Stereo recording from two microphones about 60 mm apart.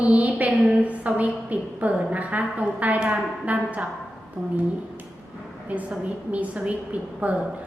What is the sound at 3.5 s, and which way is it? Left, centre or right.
Speech, right.